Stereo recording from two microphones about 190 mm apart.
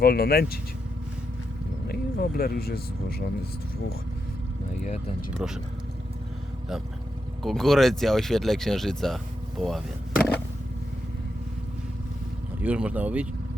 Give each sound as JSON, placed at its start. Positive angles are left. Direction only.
{"t": 0.0, "sound": "speech", "side_deg": 55}
{"t": 1.9, "sound": "speech", "side_deg": 55}
{"t": 5.4, "sound": "speech", "side_deg": -5}
{"t": 7.4, "sound": "speech", "side_deg": 0}
{"t": 12.6, "sound": "speech", "side_deg": -5}